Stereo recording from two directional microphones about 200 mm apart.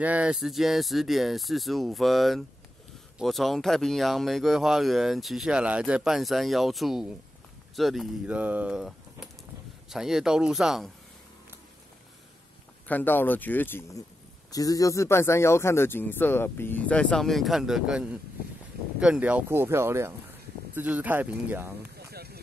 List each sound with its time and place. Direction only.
0.0 s speech: 5° right (ahead or behind)
12.8 s speech: 10° left (ahead or behind); by 21.7 s 10° right (ahead or behind)
21.9 s a sound: 50° right (ahead or behind)